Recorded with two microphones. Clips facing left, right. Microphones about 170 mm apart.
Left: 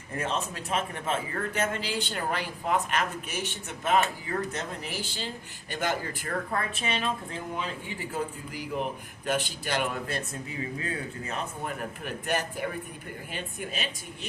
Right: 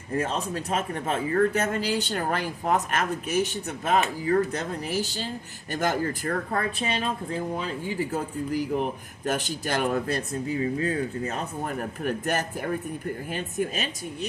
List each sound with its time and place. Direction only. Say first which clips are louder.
0.2 s speech: right 3 dB; 40° right (ahead or behind)
9.2 s speech: right 2 dB; 45° right (ahead or behind)